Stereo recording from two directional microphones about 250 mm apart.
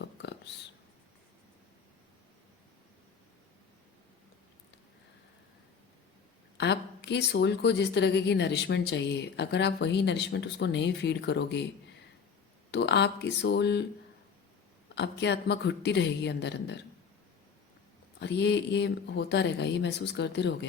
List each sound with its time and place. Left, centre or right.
0.0 s a sound: left
6.6 s a woman's voice: left
12.7 s a woman's voice: left
14.9 s a woman's voice: left
18.2 s a woman's voice: left